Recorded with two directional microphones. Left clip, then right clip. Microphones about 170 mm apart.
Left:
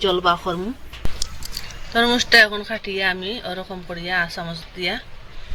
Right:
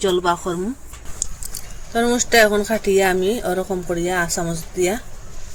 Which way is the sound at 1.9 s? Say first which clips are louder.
Left 2 dB; 55° right (ahead or behind).